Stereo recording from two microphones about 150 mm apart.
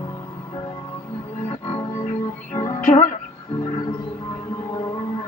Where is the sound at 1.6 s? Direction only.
25° left (ahead or behind).